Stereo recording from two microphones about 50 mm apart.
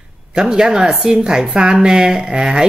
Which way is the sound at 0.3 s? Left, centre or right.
Centre.